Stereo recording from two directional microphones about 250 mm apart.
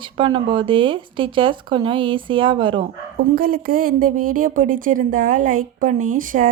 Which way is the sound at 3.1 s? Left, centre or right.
Right.